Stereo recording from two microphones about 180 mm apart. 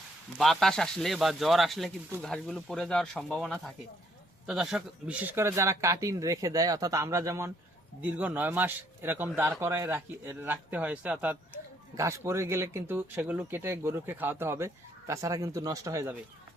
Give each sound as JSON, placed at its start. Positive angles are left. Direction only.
{"t": 0.3, "sound": "speech", "side_deg": 0}